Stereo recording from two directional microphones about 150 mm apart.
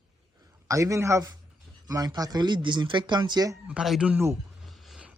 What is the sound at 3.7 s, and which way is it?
Speech, 5° right (ahead or behind).